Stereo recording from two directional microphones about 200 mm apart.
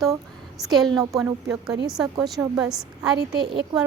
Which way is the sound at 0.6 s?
Centre (ahead or behind).